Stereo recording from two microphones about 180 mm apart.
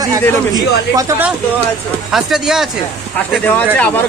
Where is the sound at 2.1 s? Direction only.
Centre (ahead or behind).